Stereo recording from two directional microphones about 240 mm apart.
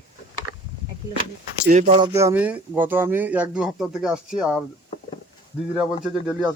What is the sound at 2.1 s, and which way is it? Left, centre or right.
Speech, centre.